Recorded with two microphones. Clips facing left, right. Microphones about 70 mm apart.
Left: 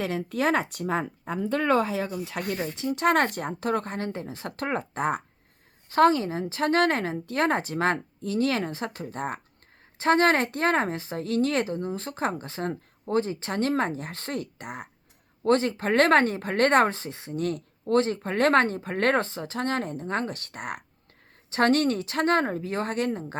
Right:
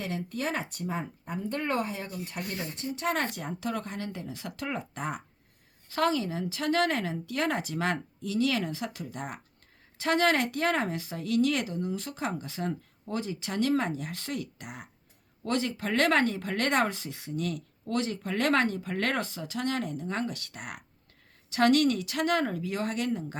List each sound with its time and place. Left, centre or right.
0.0 s speech: left
5.9 s speech: left